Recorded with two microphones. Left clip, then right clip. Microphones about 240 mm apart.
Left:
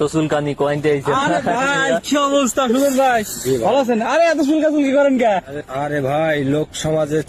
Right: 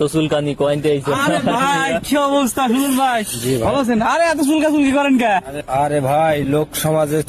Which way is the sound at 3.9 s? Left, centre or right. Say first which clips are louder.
Even; centre.